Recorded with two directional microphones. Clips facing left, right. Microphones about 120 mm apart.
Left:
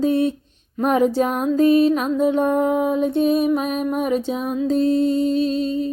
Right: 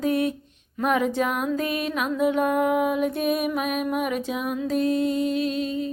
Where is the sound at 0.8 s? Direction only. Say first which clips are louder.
Left 5 dB; 35° left (ahead or behind).